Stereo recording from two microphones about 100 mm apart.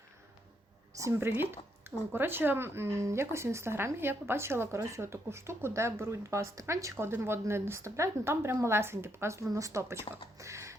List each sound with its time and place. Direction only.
0.9 s a woman's voice: 25° right (ahead or behind)